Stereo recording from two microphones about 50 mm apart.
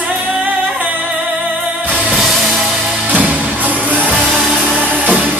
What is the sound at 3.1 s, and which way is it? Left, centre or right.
Music, right.